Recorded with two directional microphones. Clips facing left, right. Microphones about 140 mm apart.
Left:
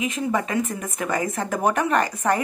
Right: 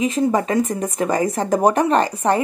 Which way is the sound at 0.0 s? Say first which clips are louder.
Right 6 dB; 35° right (ahead or behind).